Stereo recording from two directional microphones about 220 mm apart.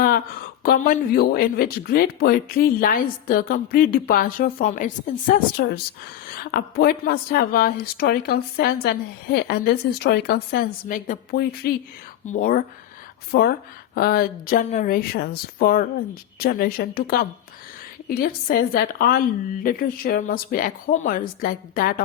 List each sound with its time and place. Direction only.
0.6 s a woman's voice: 40° left (ahead or behind)